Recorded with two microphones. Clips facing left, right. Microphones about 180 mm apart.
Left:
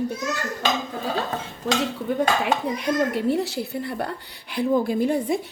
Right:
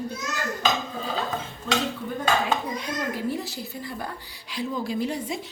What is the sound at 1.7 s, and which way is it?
Dishes, 80° left.